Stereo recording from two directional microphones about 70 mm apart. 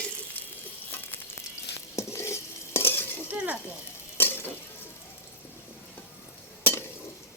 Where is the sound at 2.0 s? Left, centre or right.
Left.